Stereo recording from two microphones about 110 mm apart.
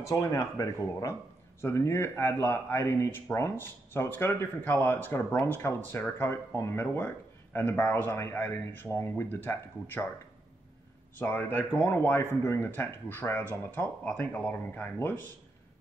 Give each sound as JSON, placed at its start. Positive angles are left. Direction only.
{"t": 0.0, "sound": "speech", "side_deg": 30}
{"t": 11.1, "sound": "speech", "side_deg": 15}